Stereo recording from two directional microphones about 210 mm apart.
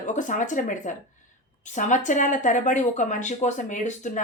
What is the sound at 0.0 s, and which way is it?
Speech, 35° left (ahead or behind).